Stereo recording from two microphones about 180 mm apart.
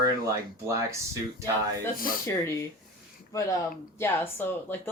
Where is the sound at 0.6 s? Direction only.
15° right (ahead or behind).